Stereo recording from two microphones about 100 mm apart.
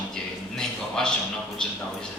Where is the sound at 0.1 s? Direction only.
5° left (ahead or behind).